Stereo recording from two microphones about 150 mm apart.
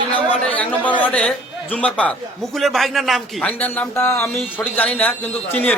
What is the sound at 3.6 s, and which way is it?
A man's voice, 15° left (ahead or behind).